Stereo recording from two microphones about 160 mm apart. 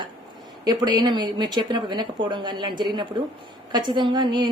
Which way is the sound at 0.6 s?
25° right (ahead or behind).